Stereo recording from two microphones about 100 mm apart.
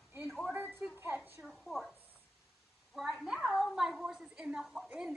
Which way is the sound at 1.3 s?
Centre (ahead or behind).